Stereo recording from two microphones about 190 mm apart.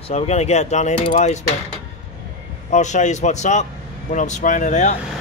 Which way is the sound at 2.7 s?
40° left (ahead or behind).